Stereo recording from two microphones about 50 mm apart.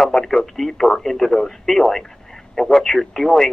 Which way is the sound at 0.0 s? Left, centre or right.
Centre.